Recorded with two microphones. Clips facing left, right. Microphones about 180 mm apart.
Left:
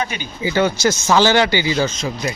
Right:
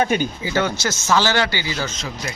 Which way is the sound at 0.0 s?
50° right (ahead or behind).